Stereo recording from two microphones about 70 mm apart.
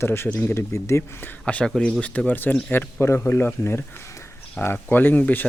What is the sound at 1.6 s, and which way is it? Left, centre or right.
Speech, centre.